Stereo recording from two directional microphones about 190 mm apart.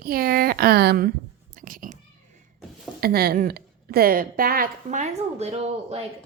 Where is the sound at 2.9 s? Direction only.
55° right (ahead or behind); by 6.0 s 35° right (ahead or behind).